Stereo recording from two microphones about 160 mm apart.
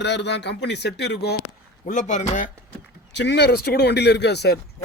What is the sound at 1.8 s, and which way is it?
Speech, 50° left (ahead or behind).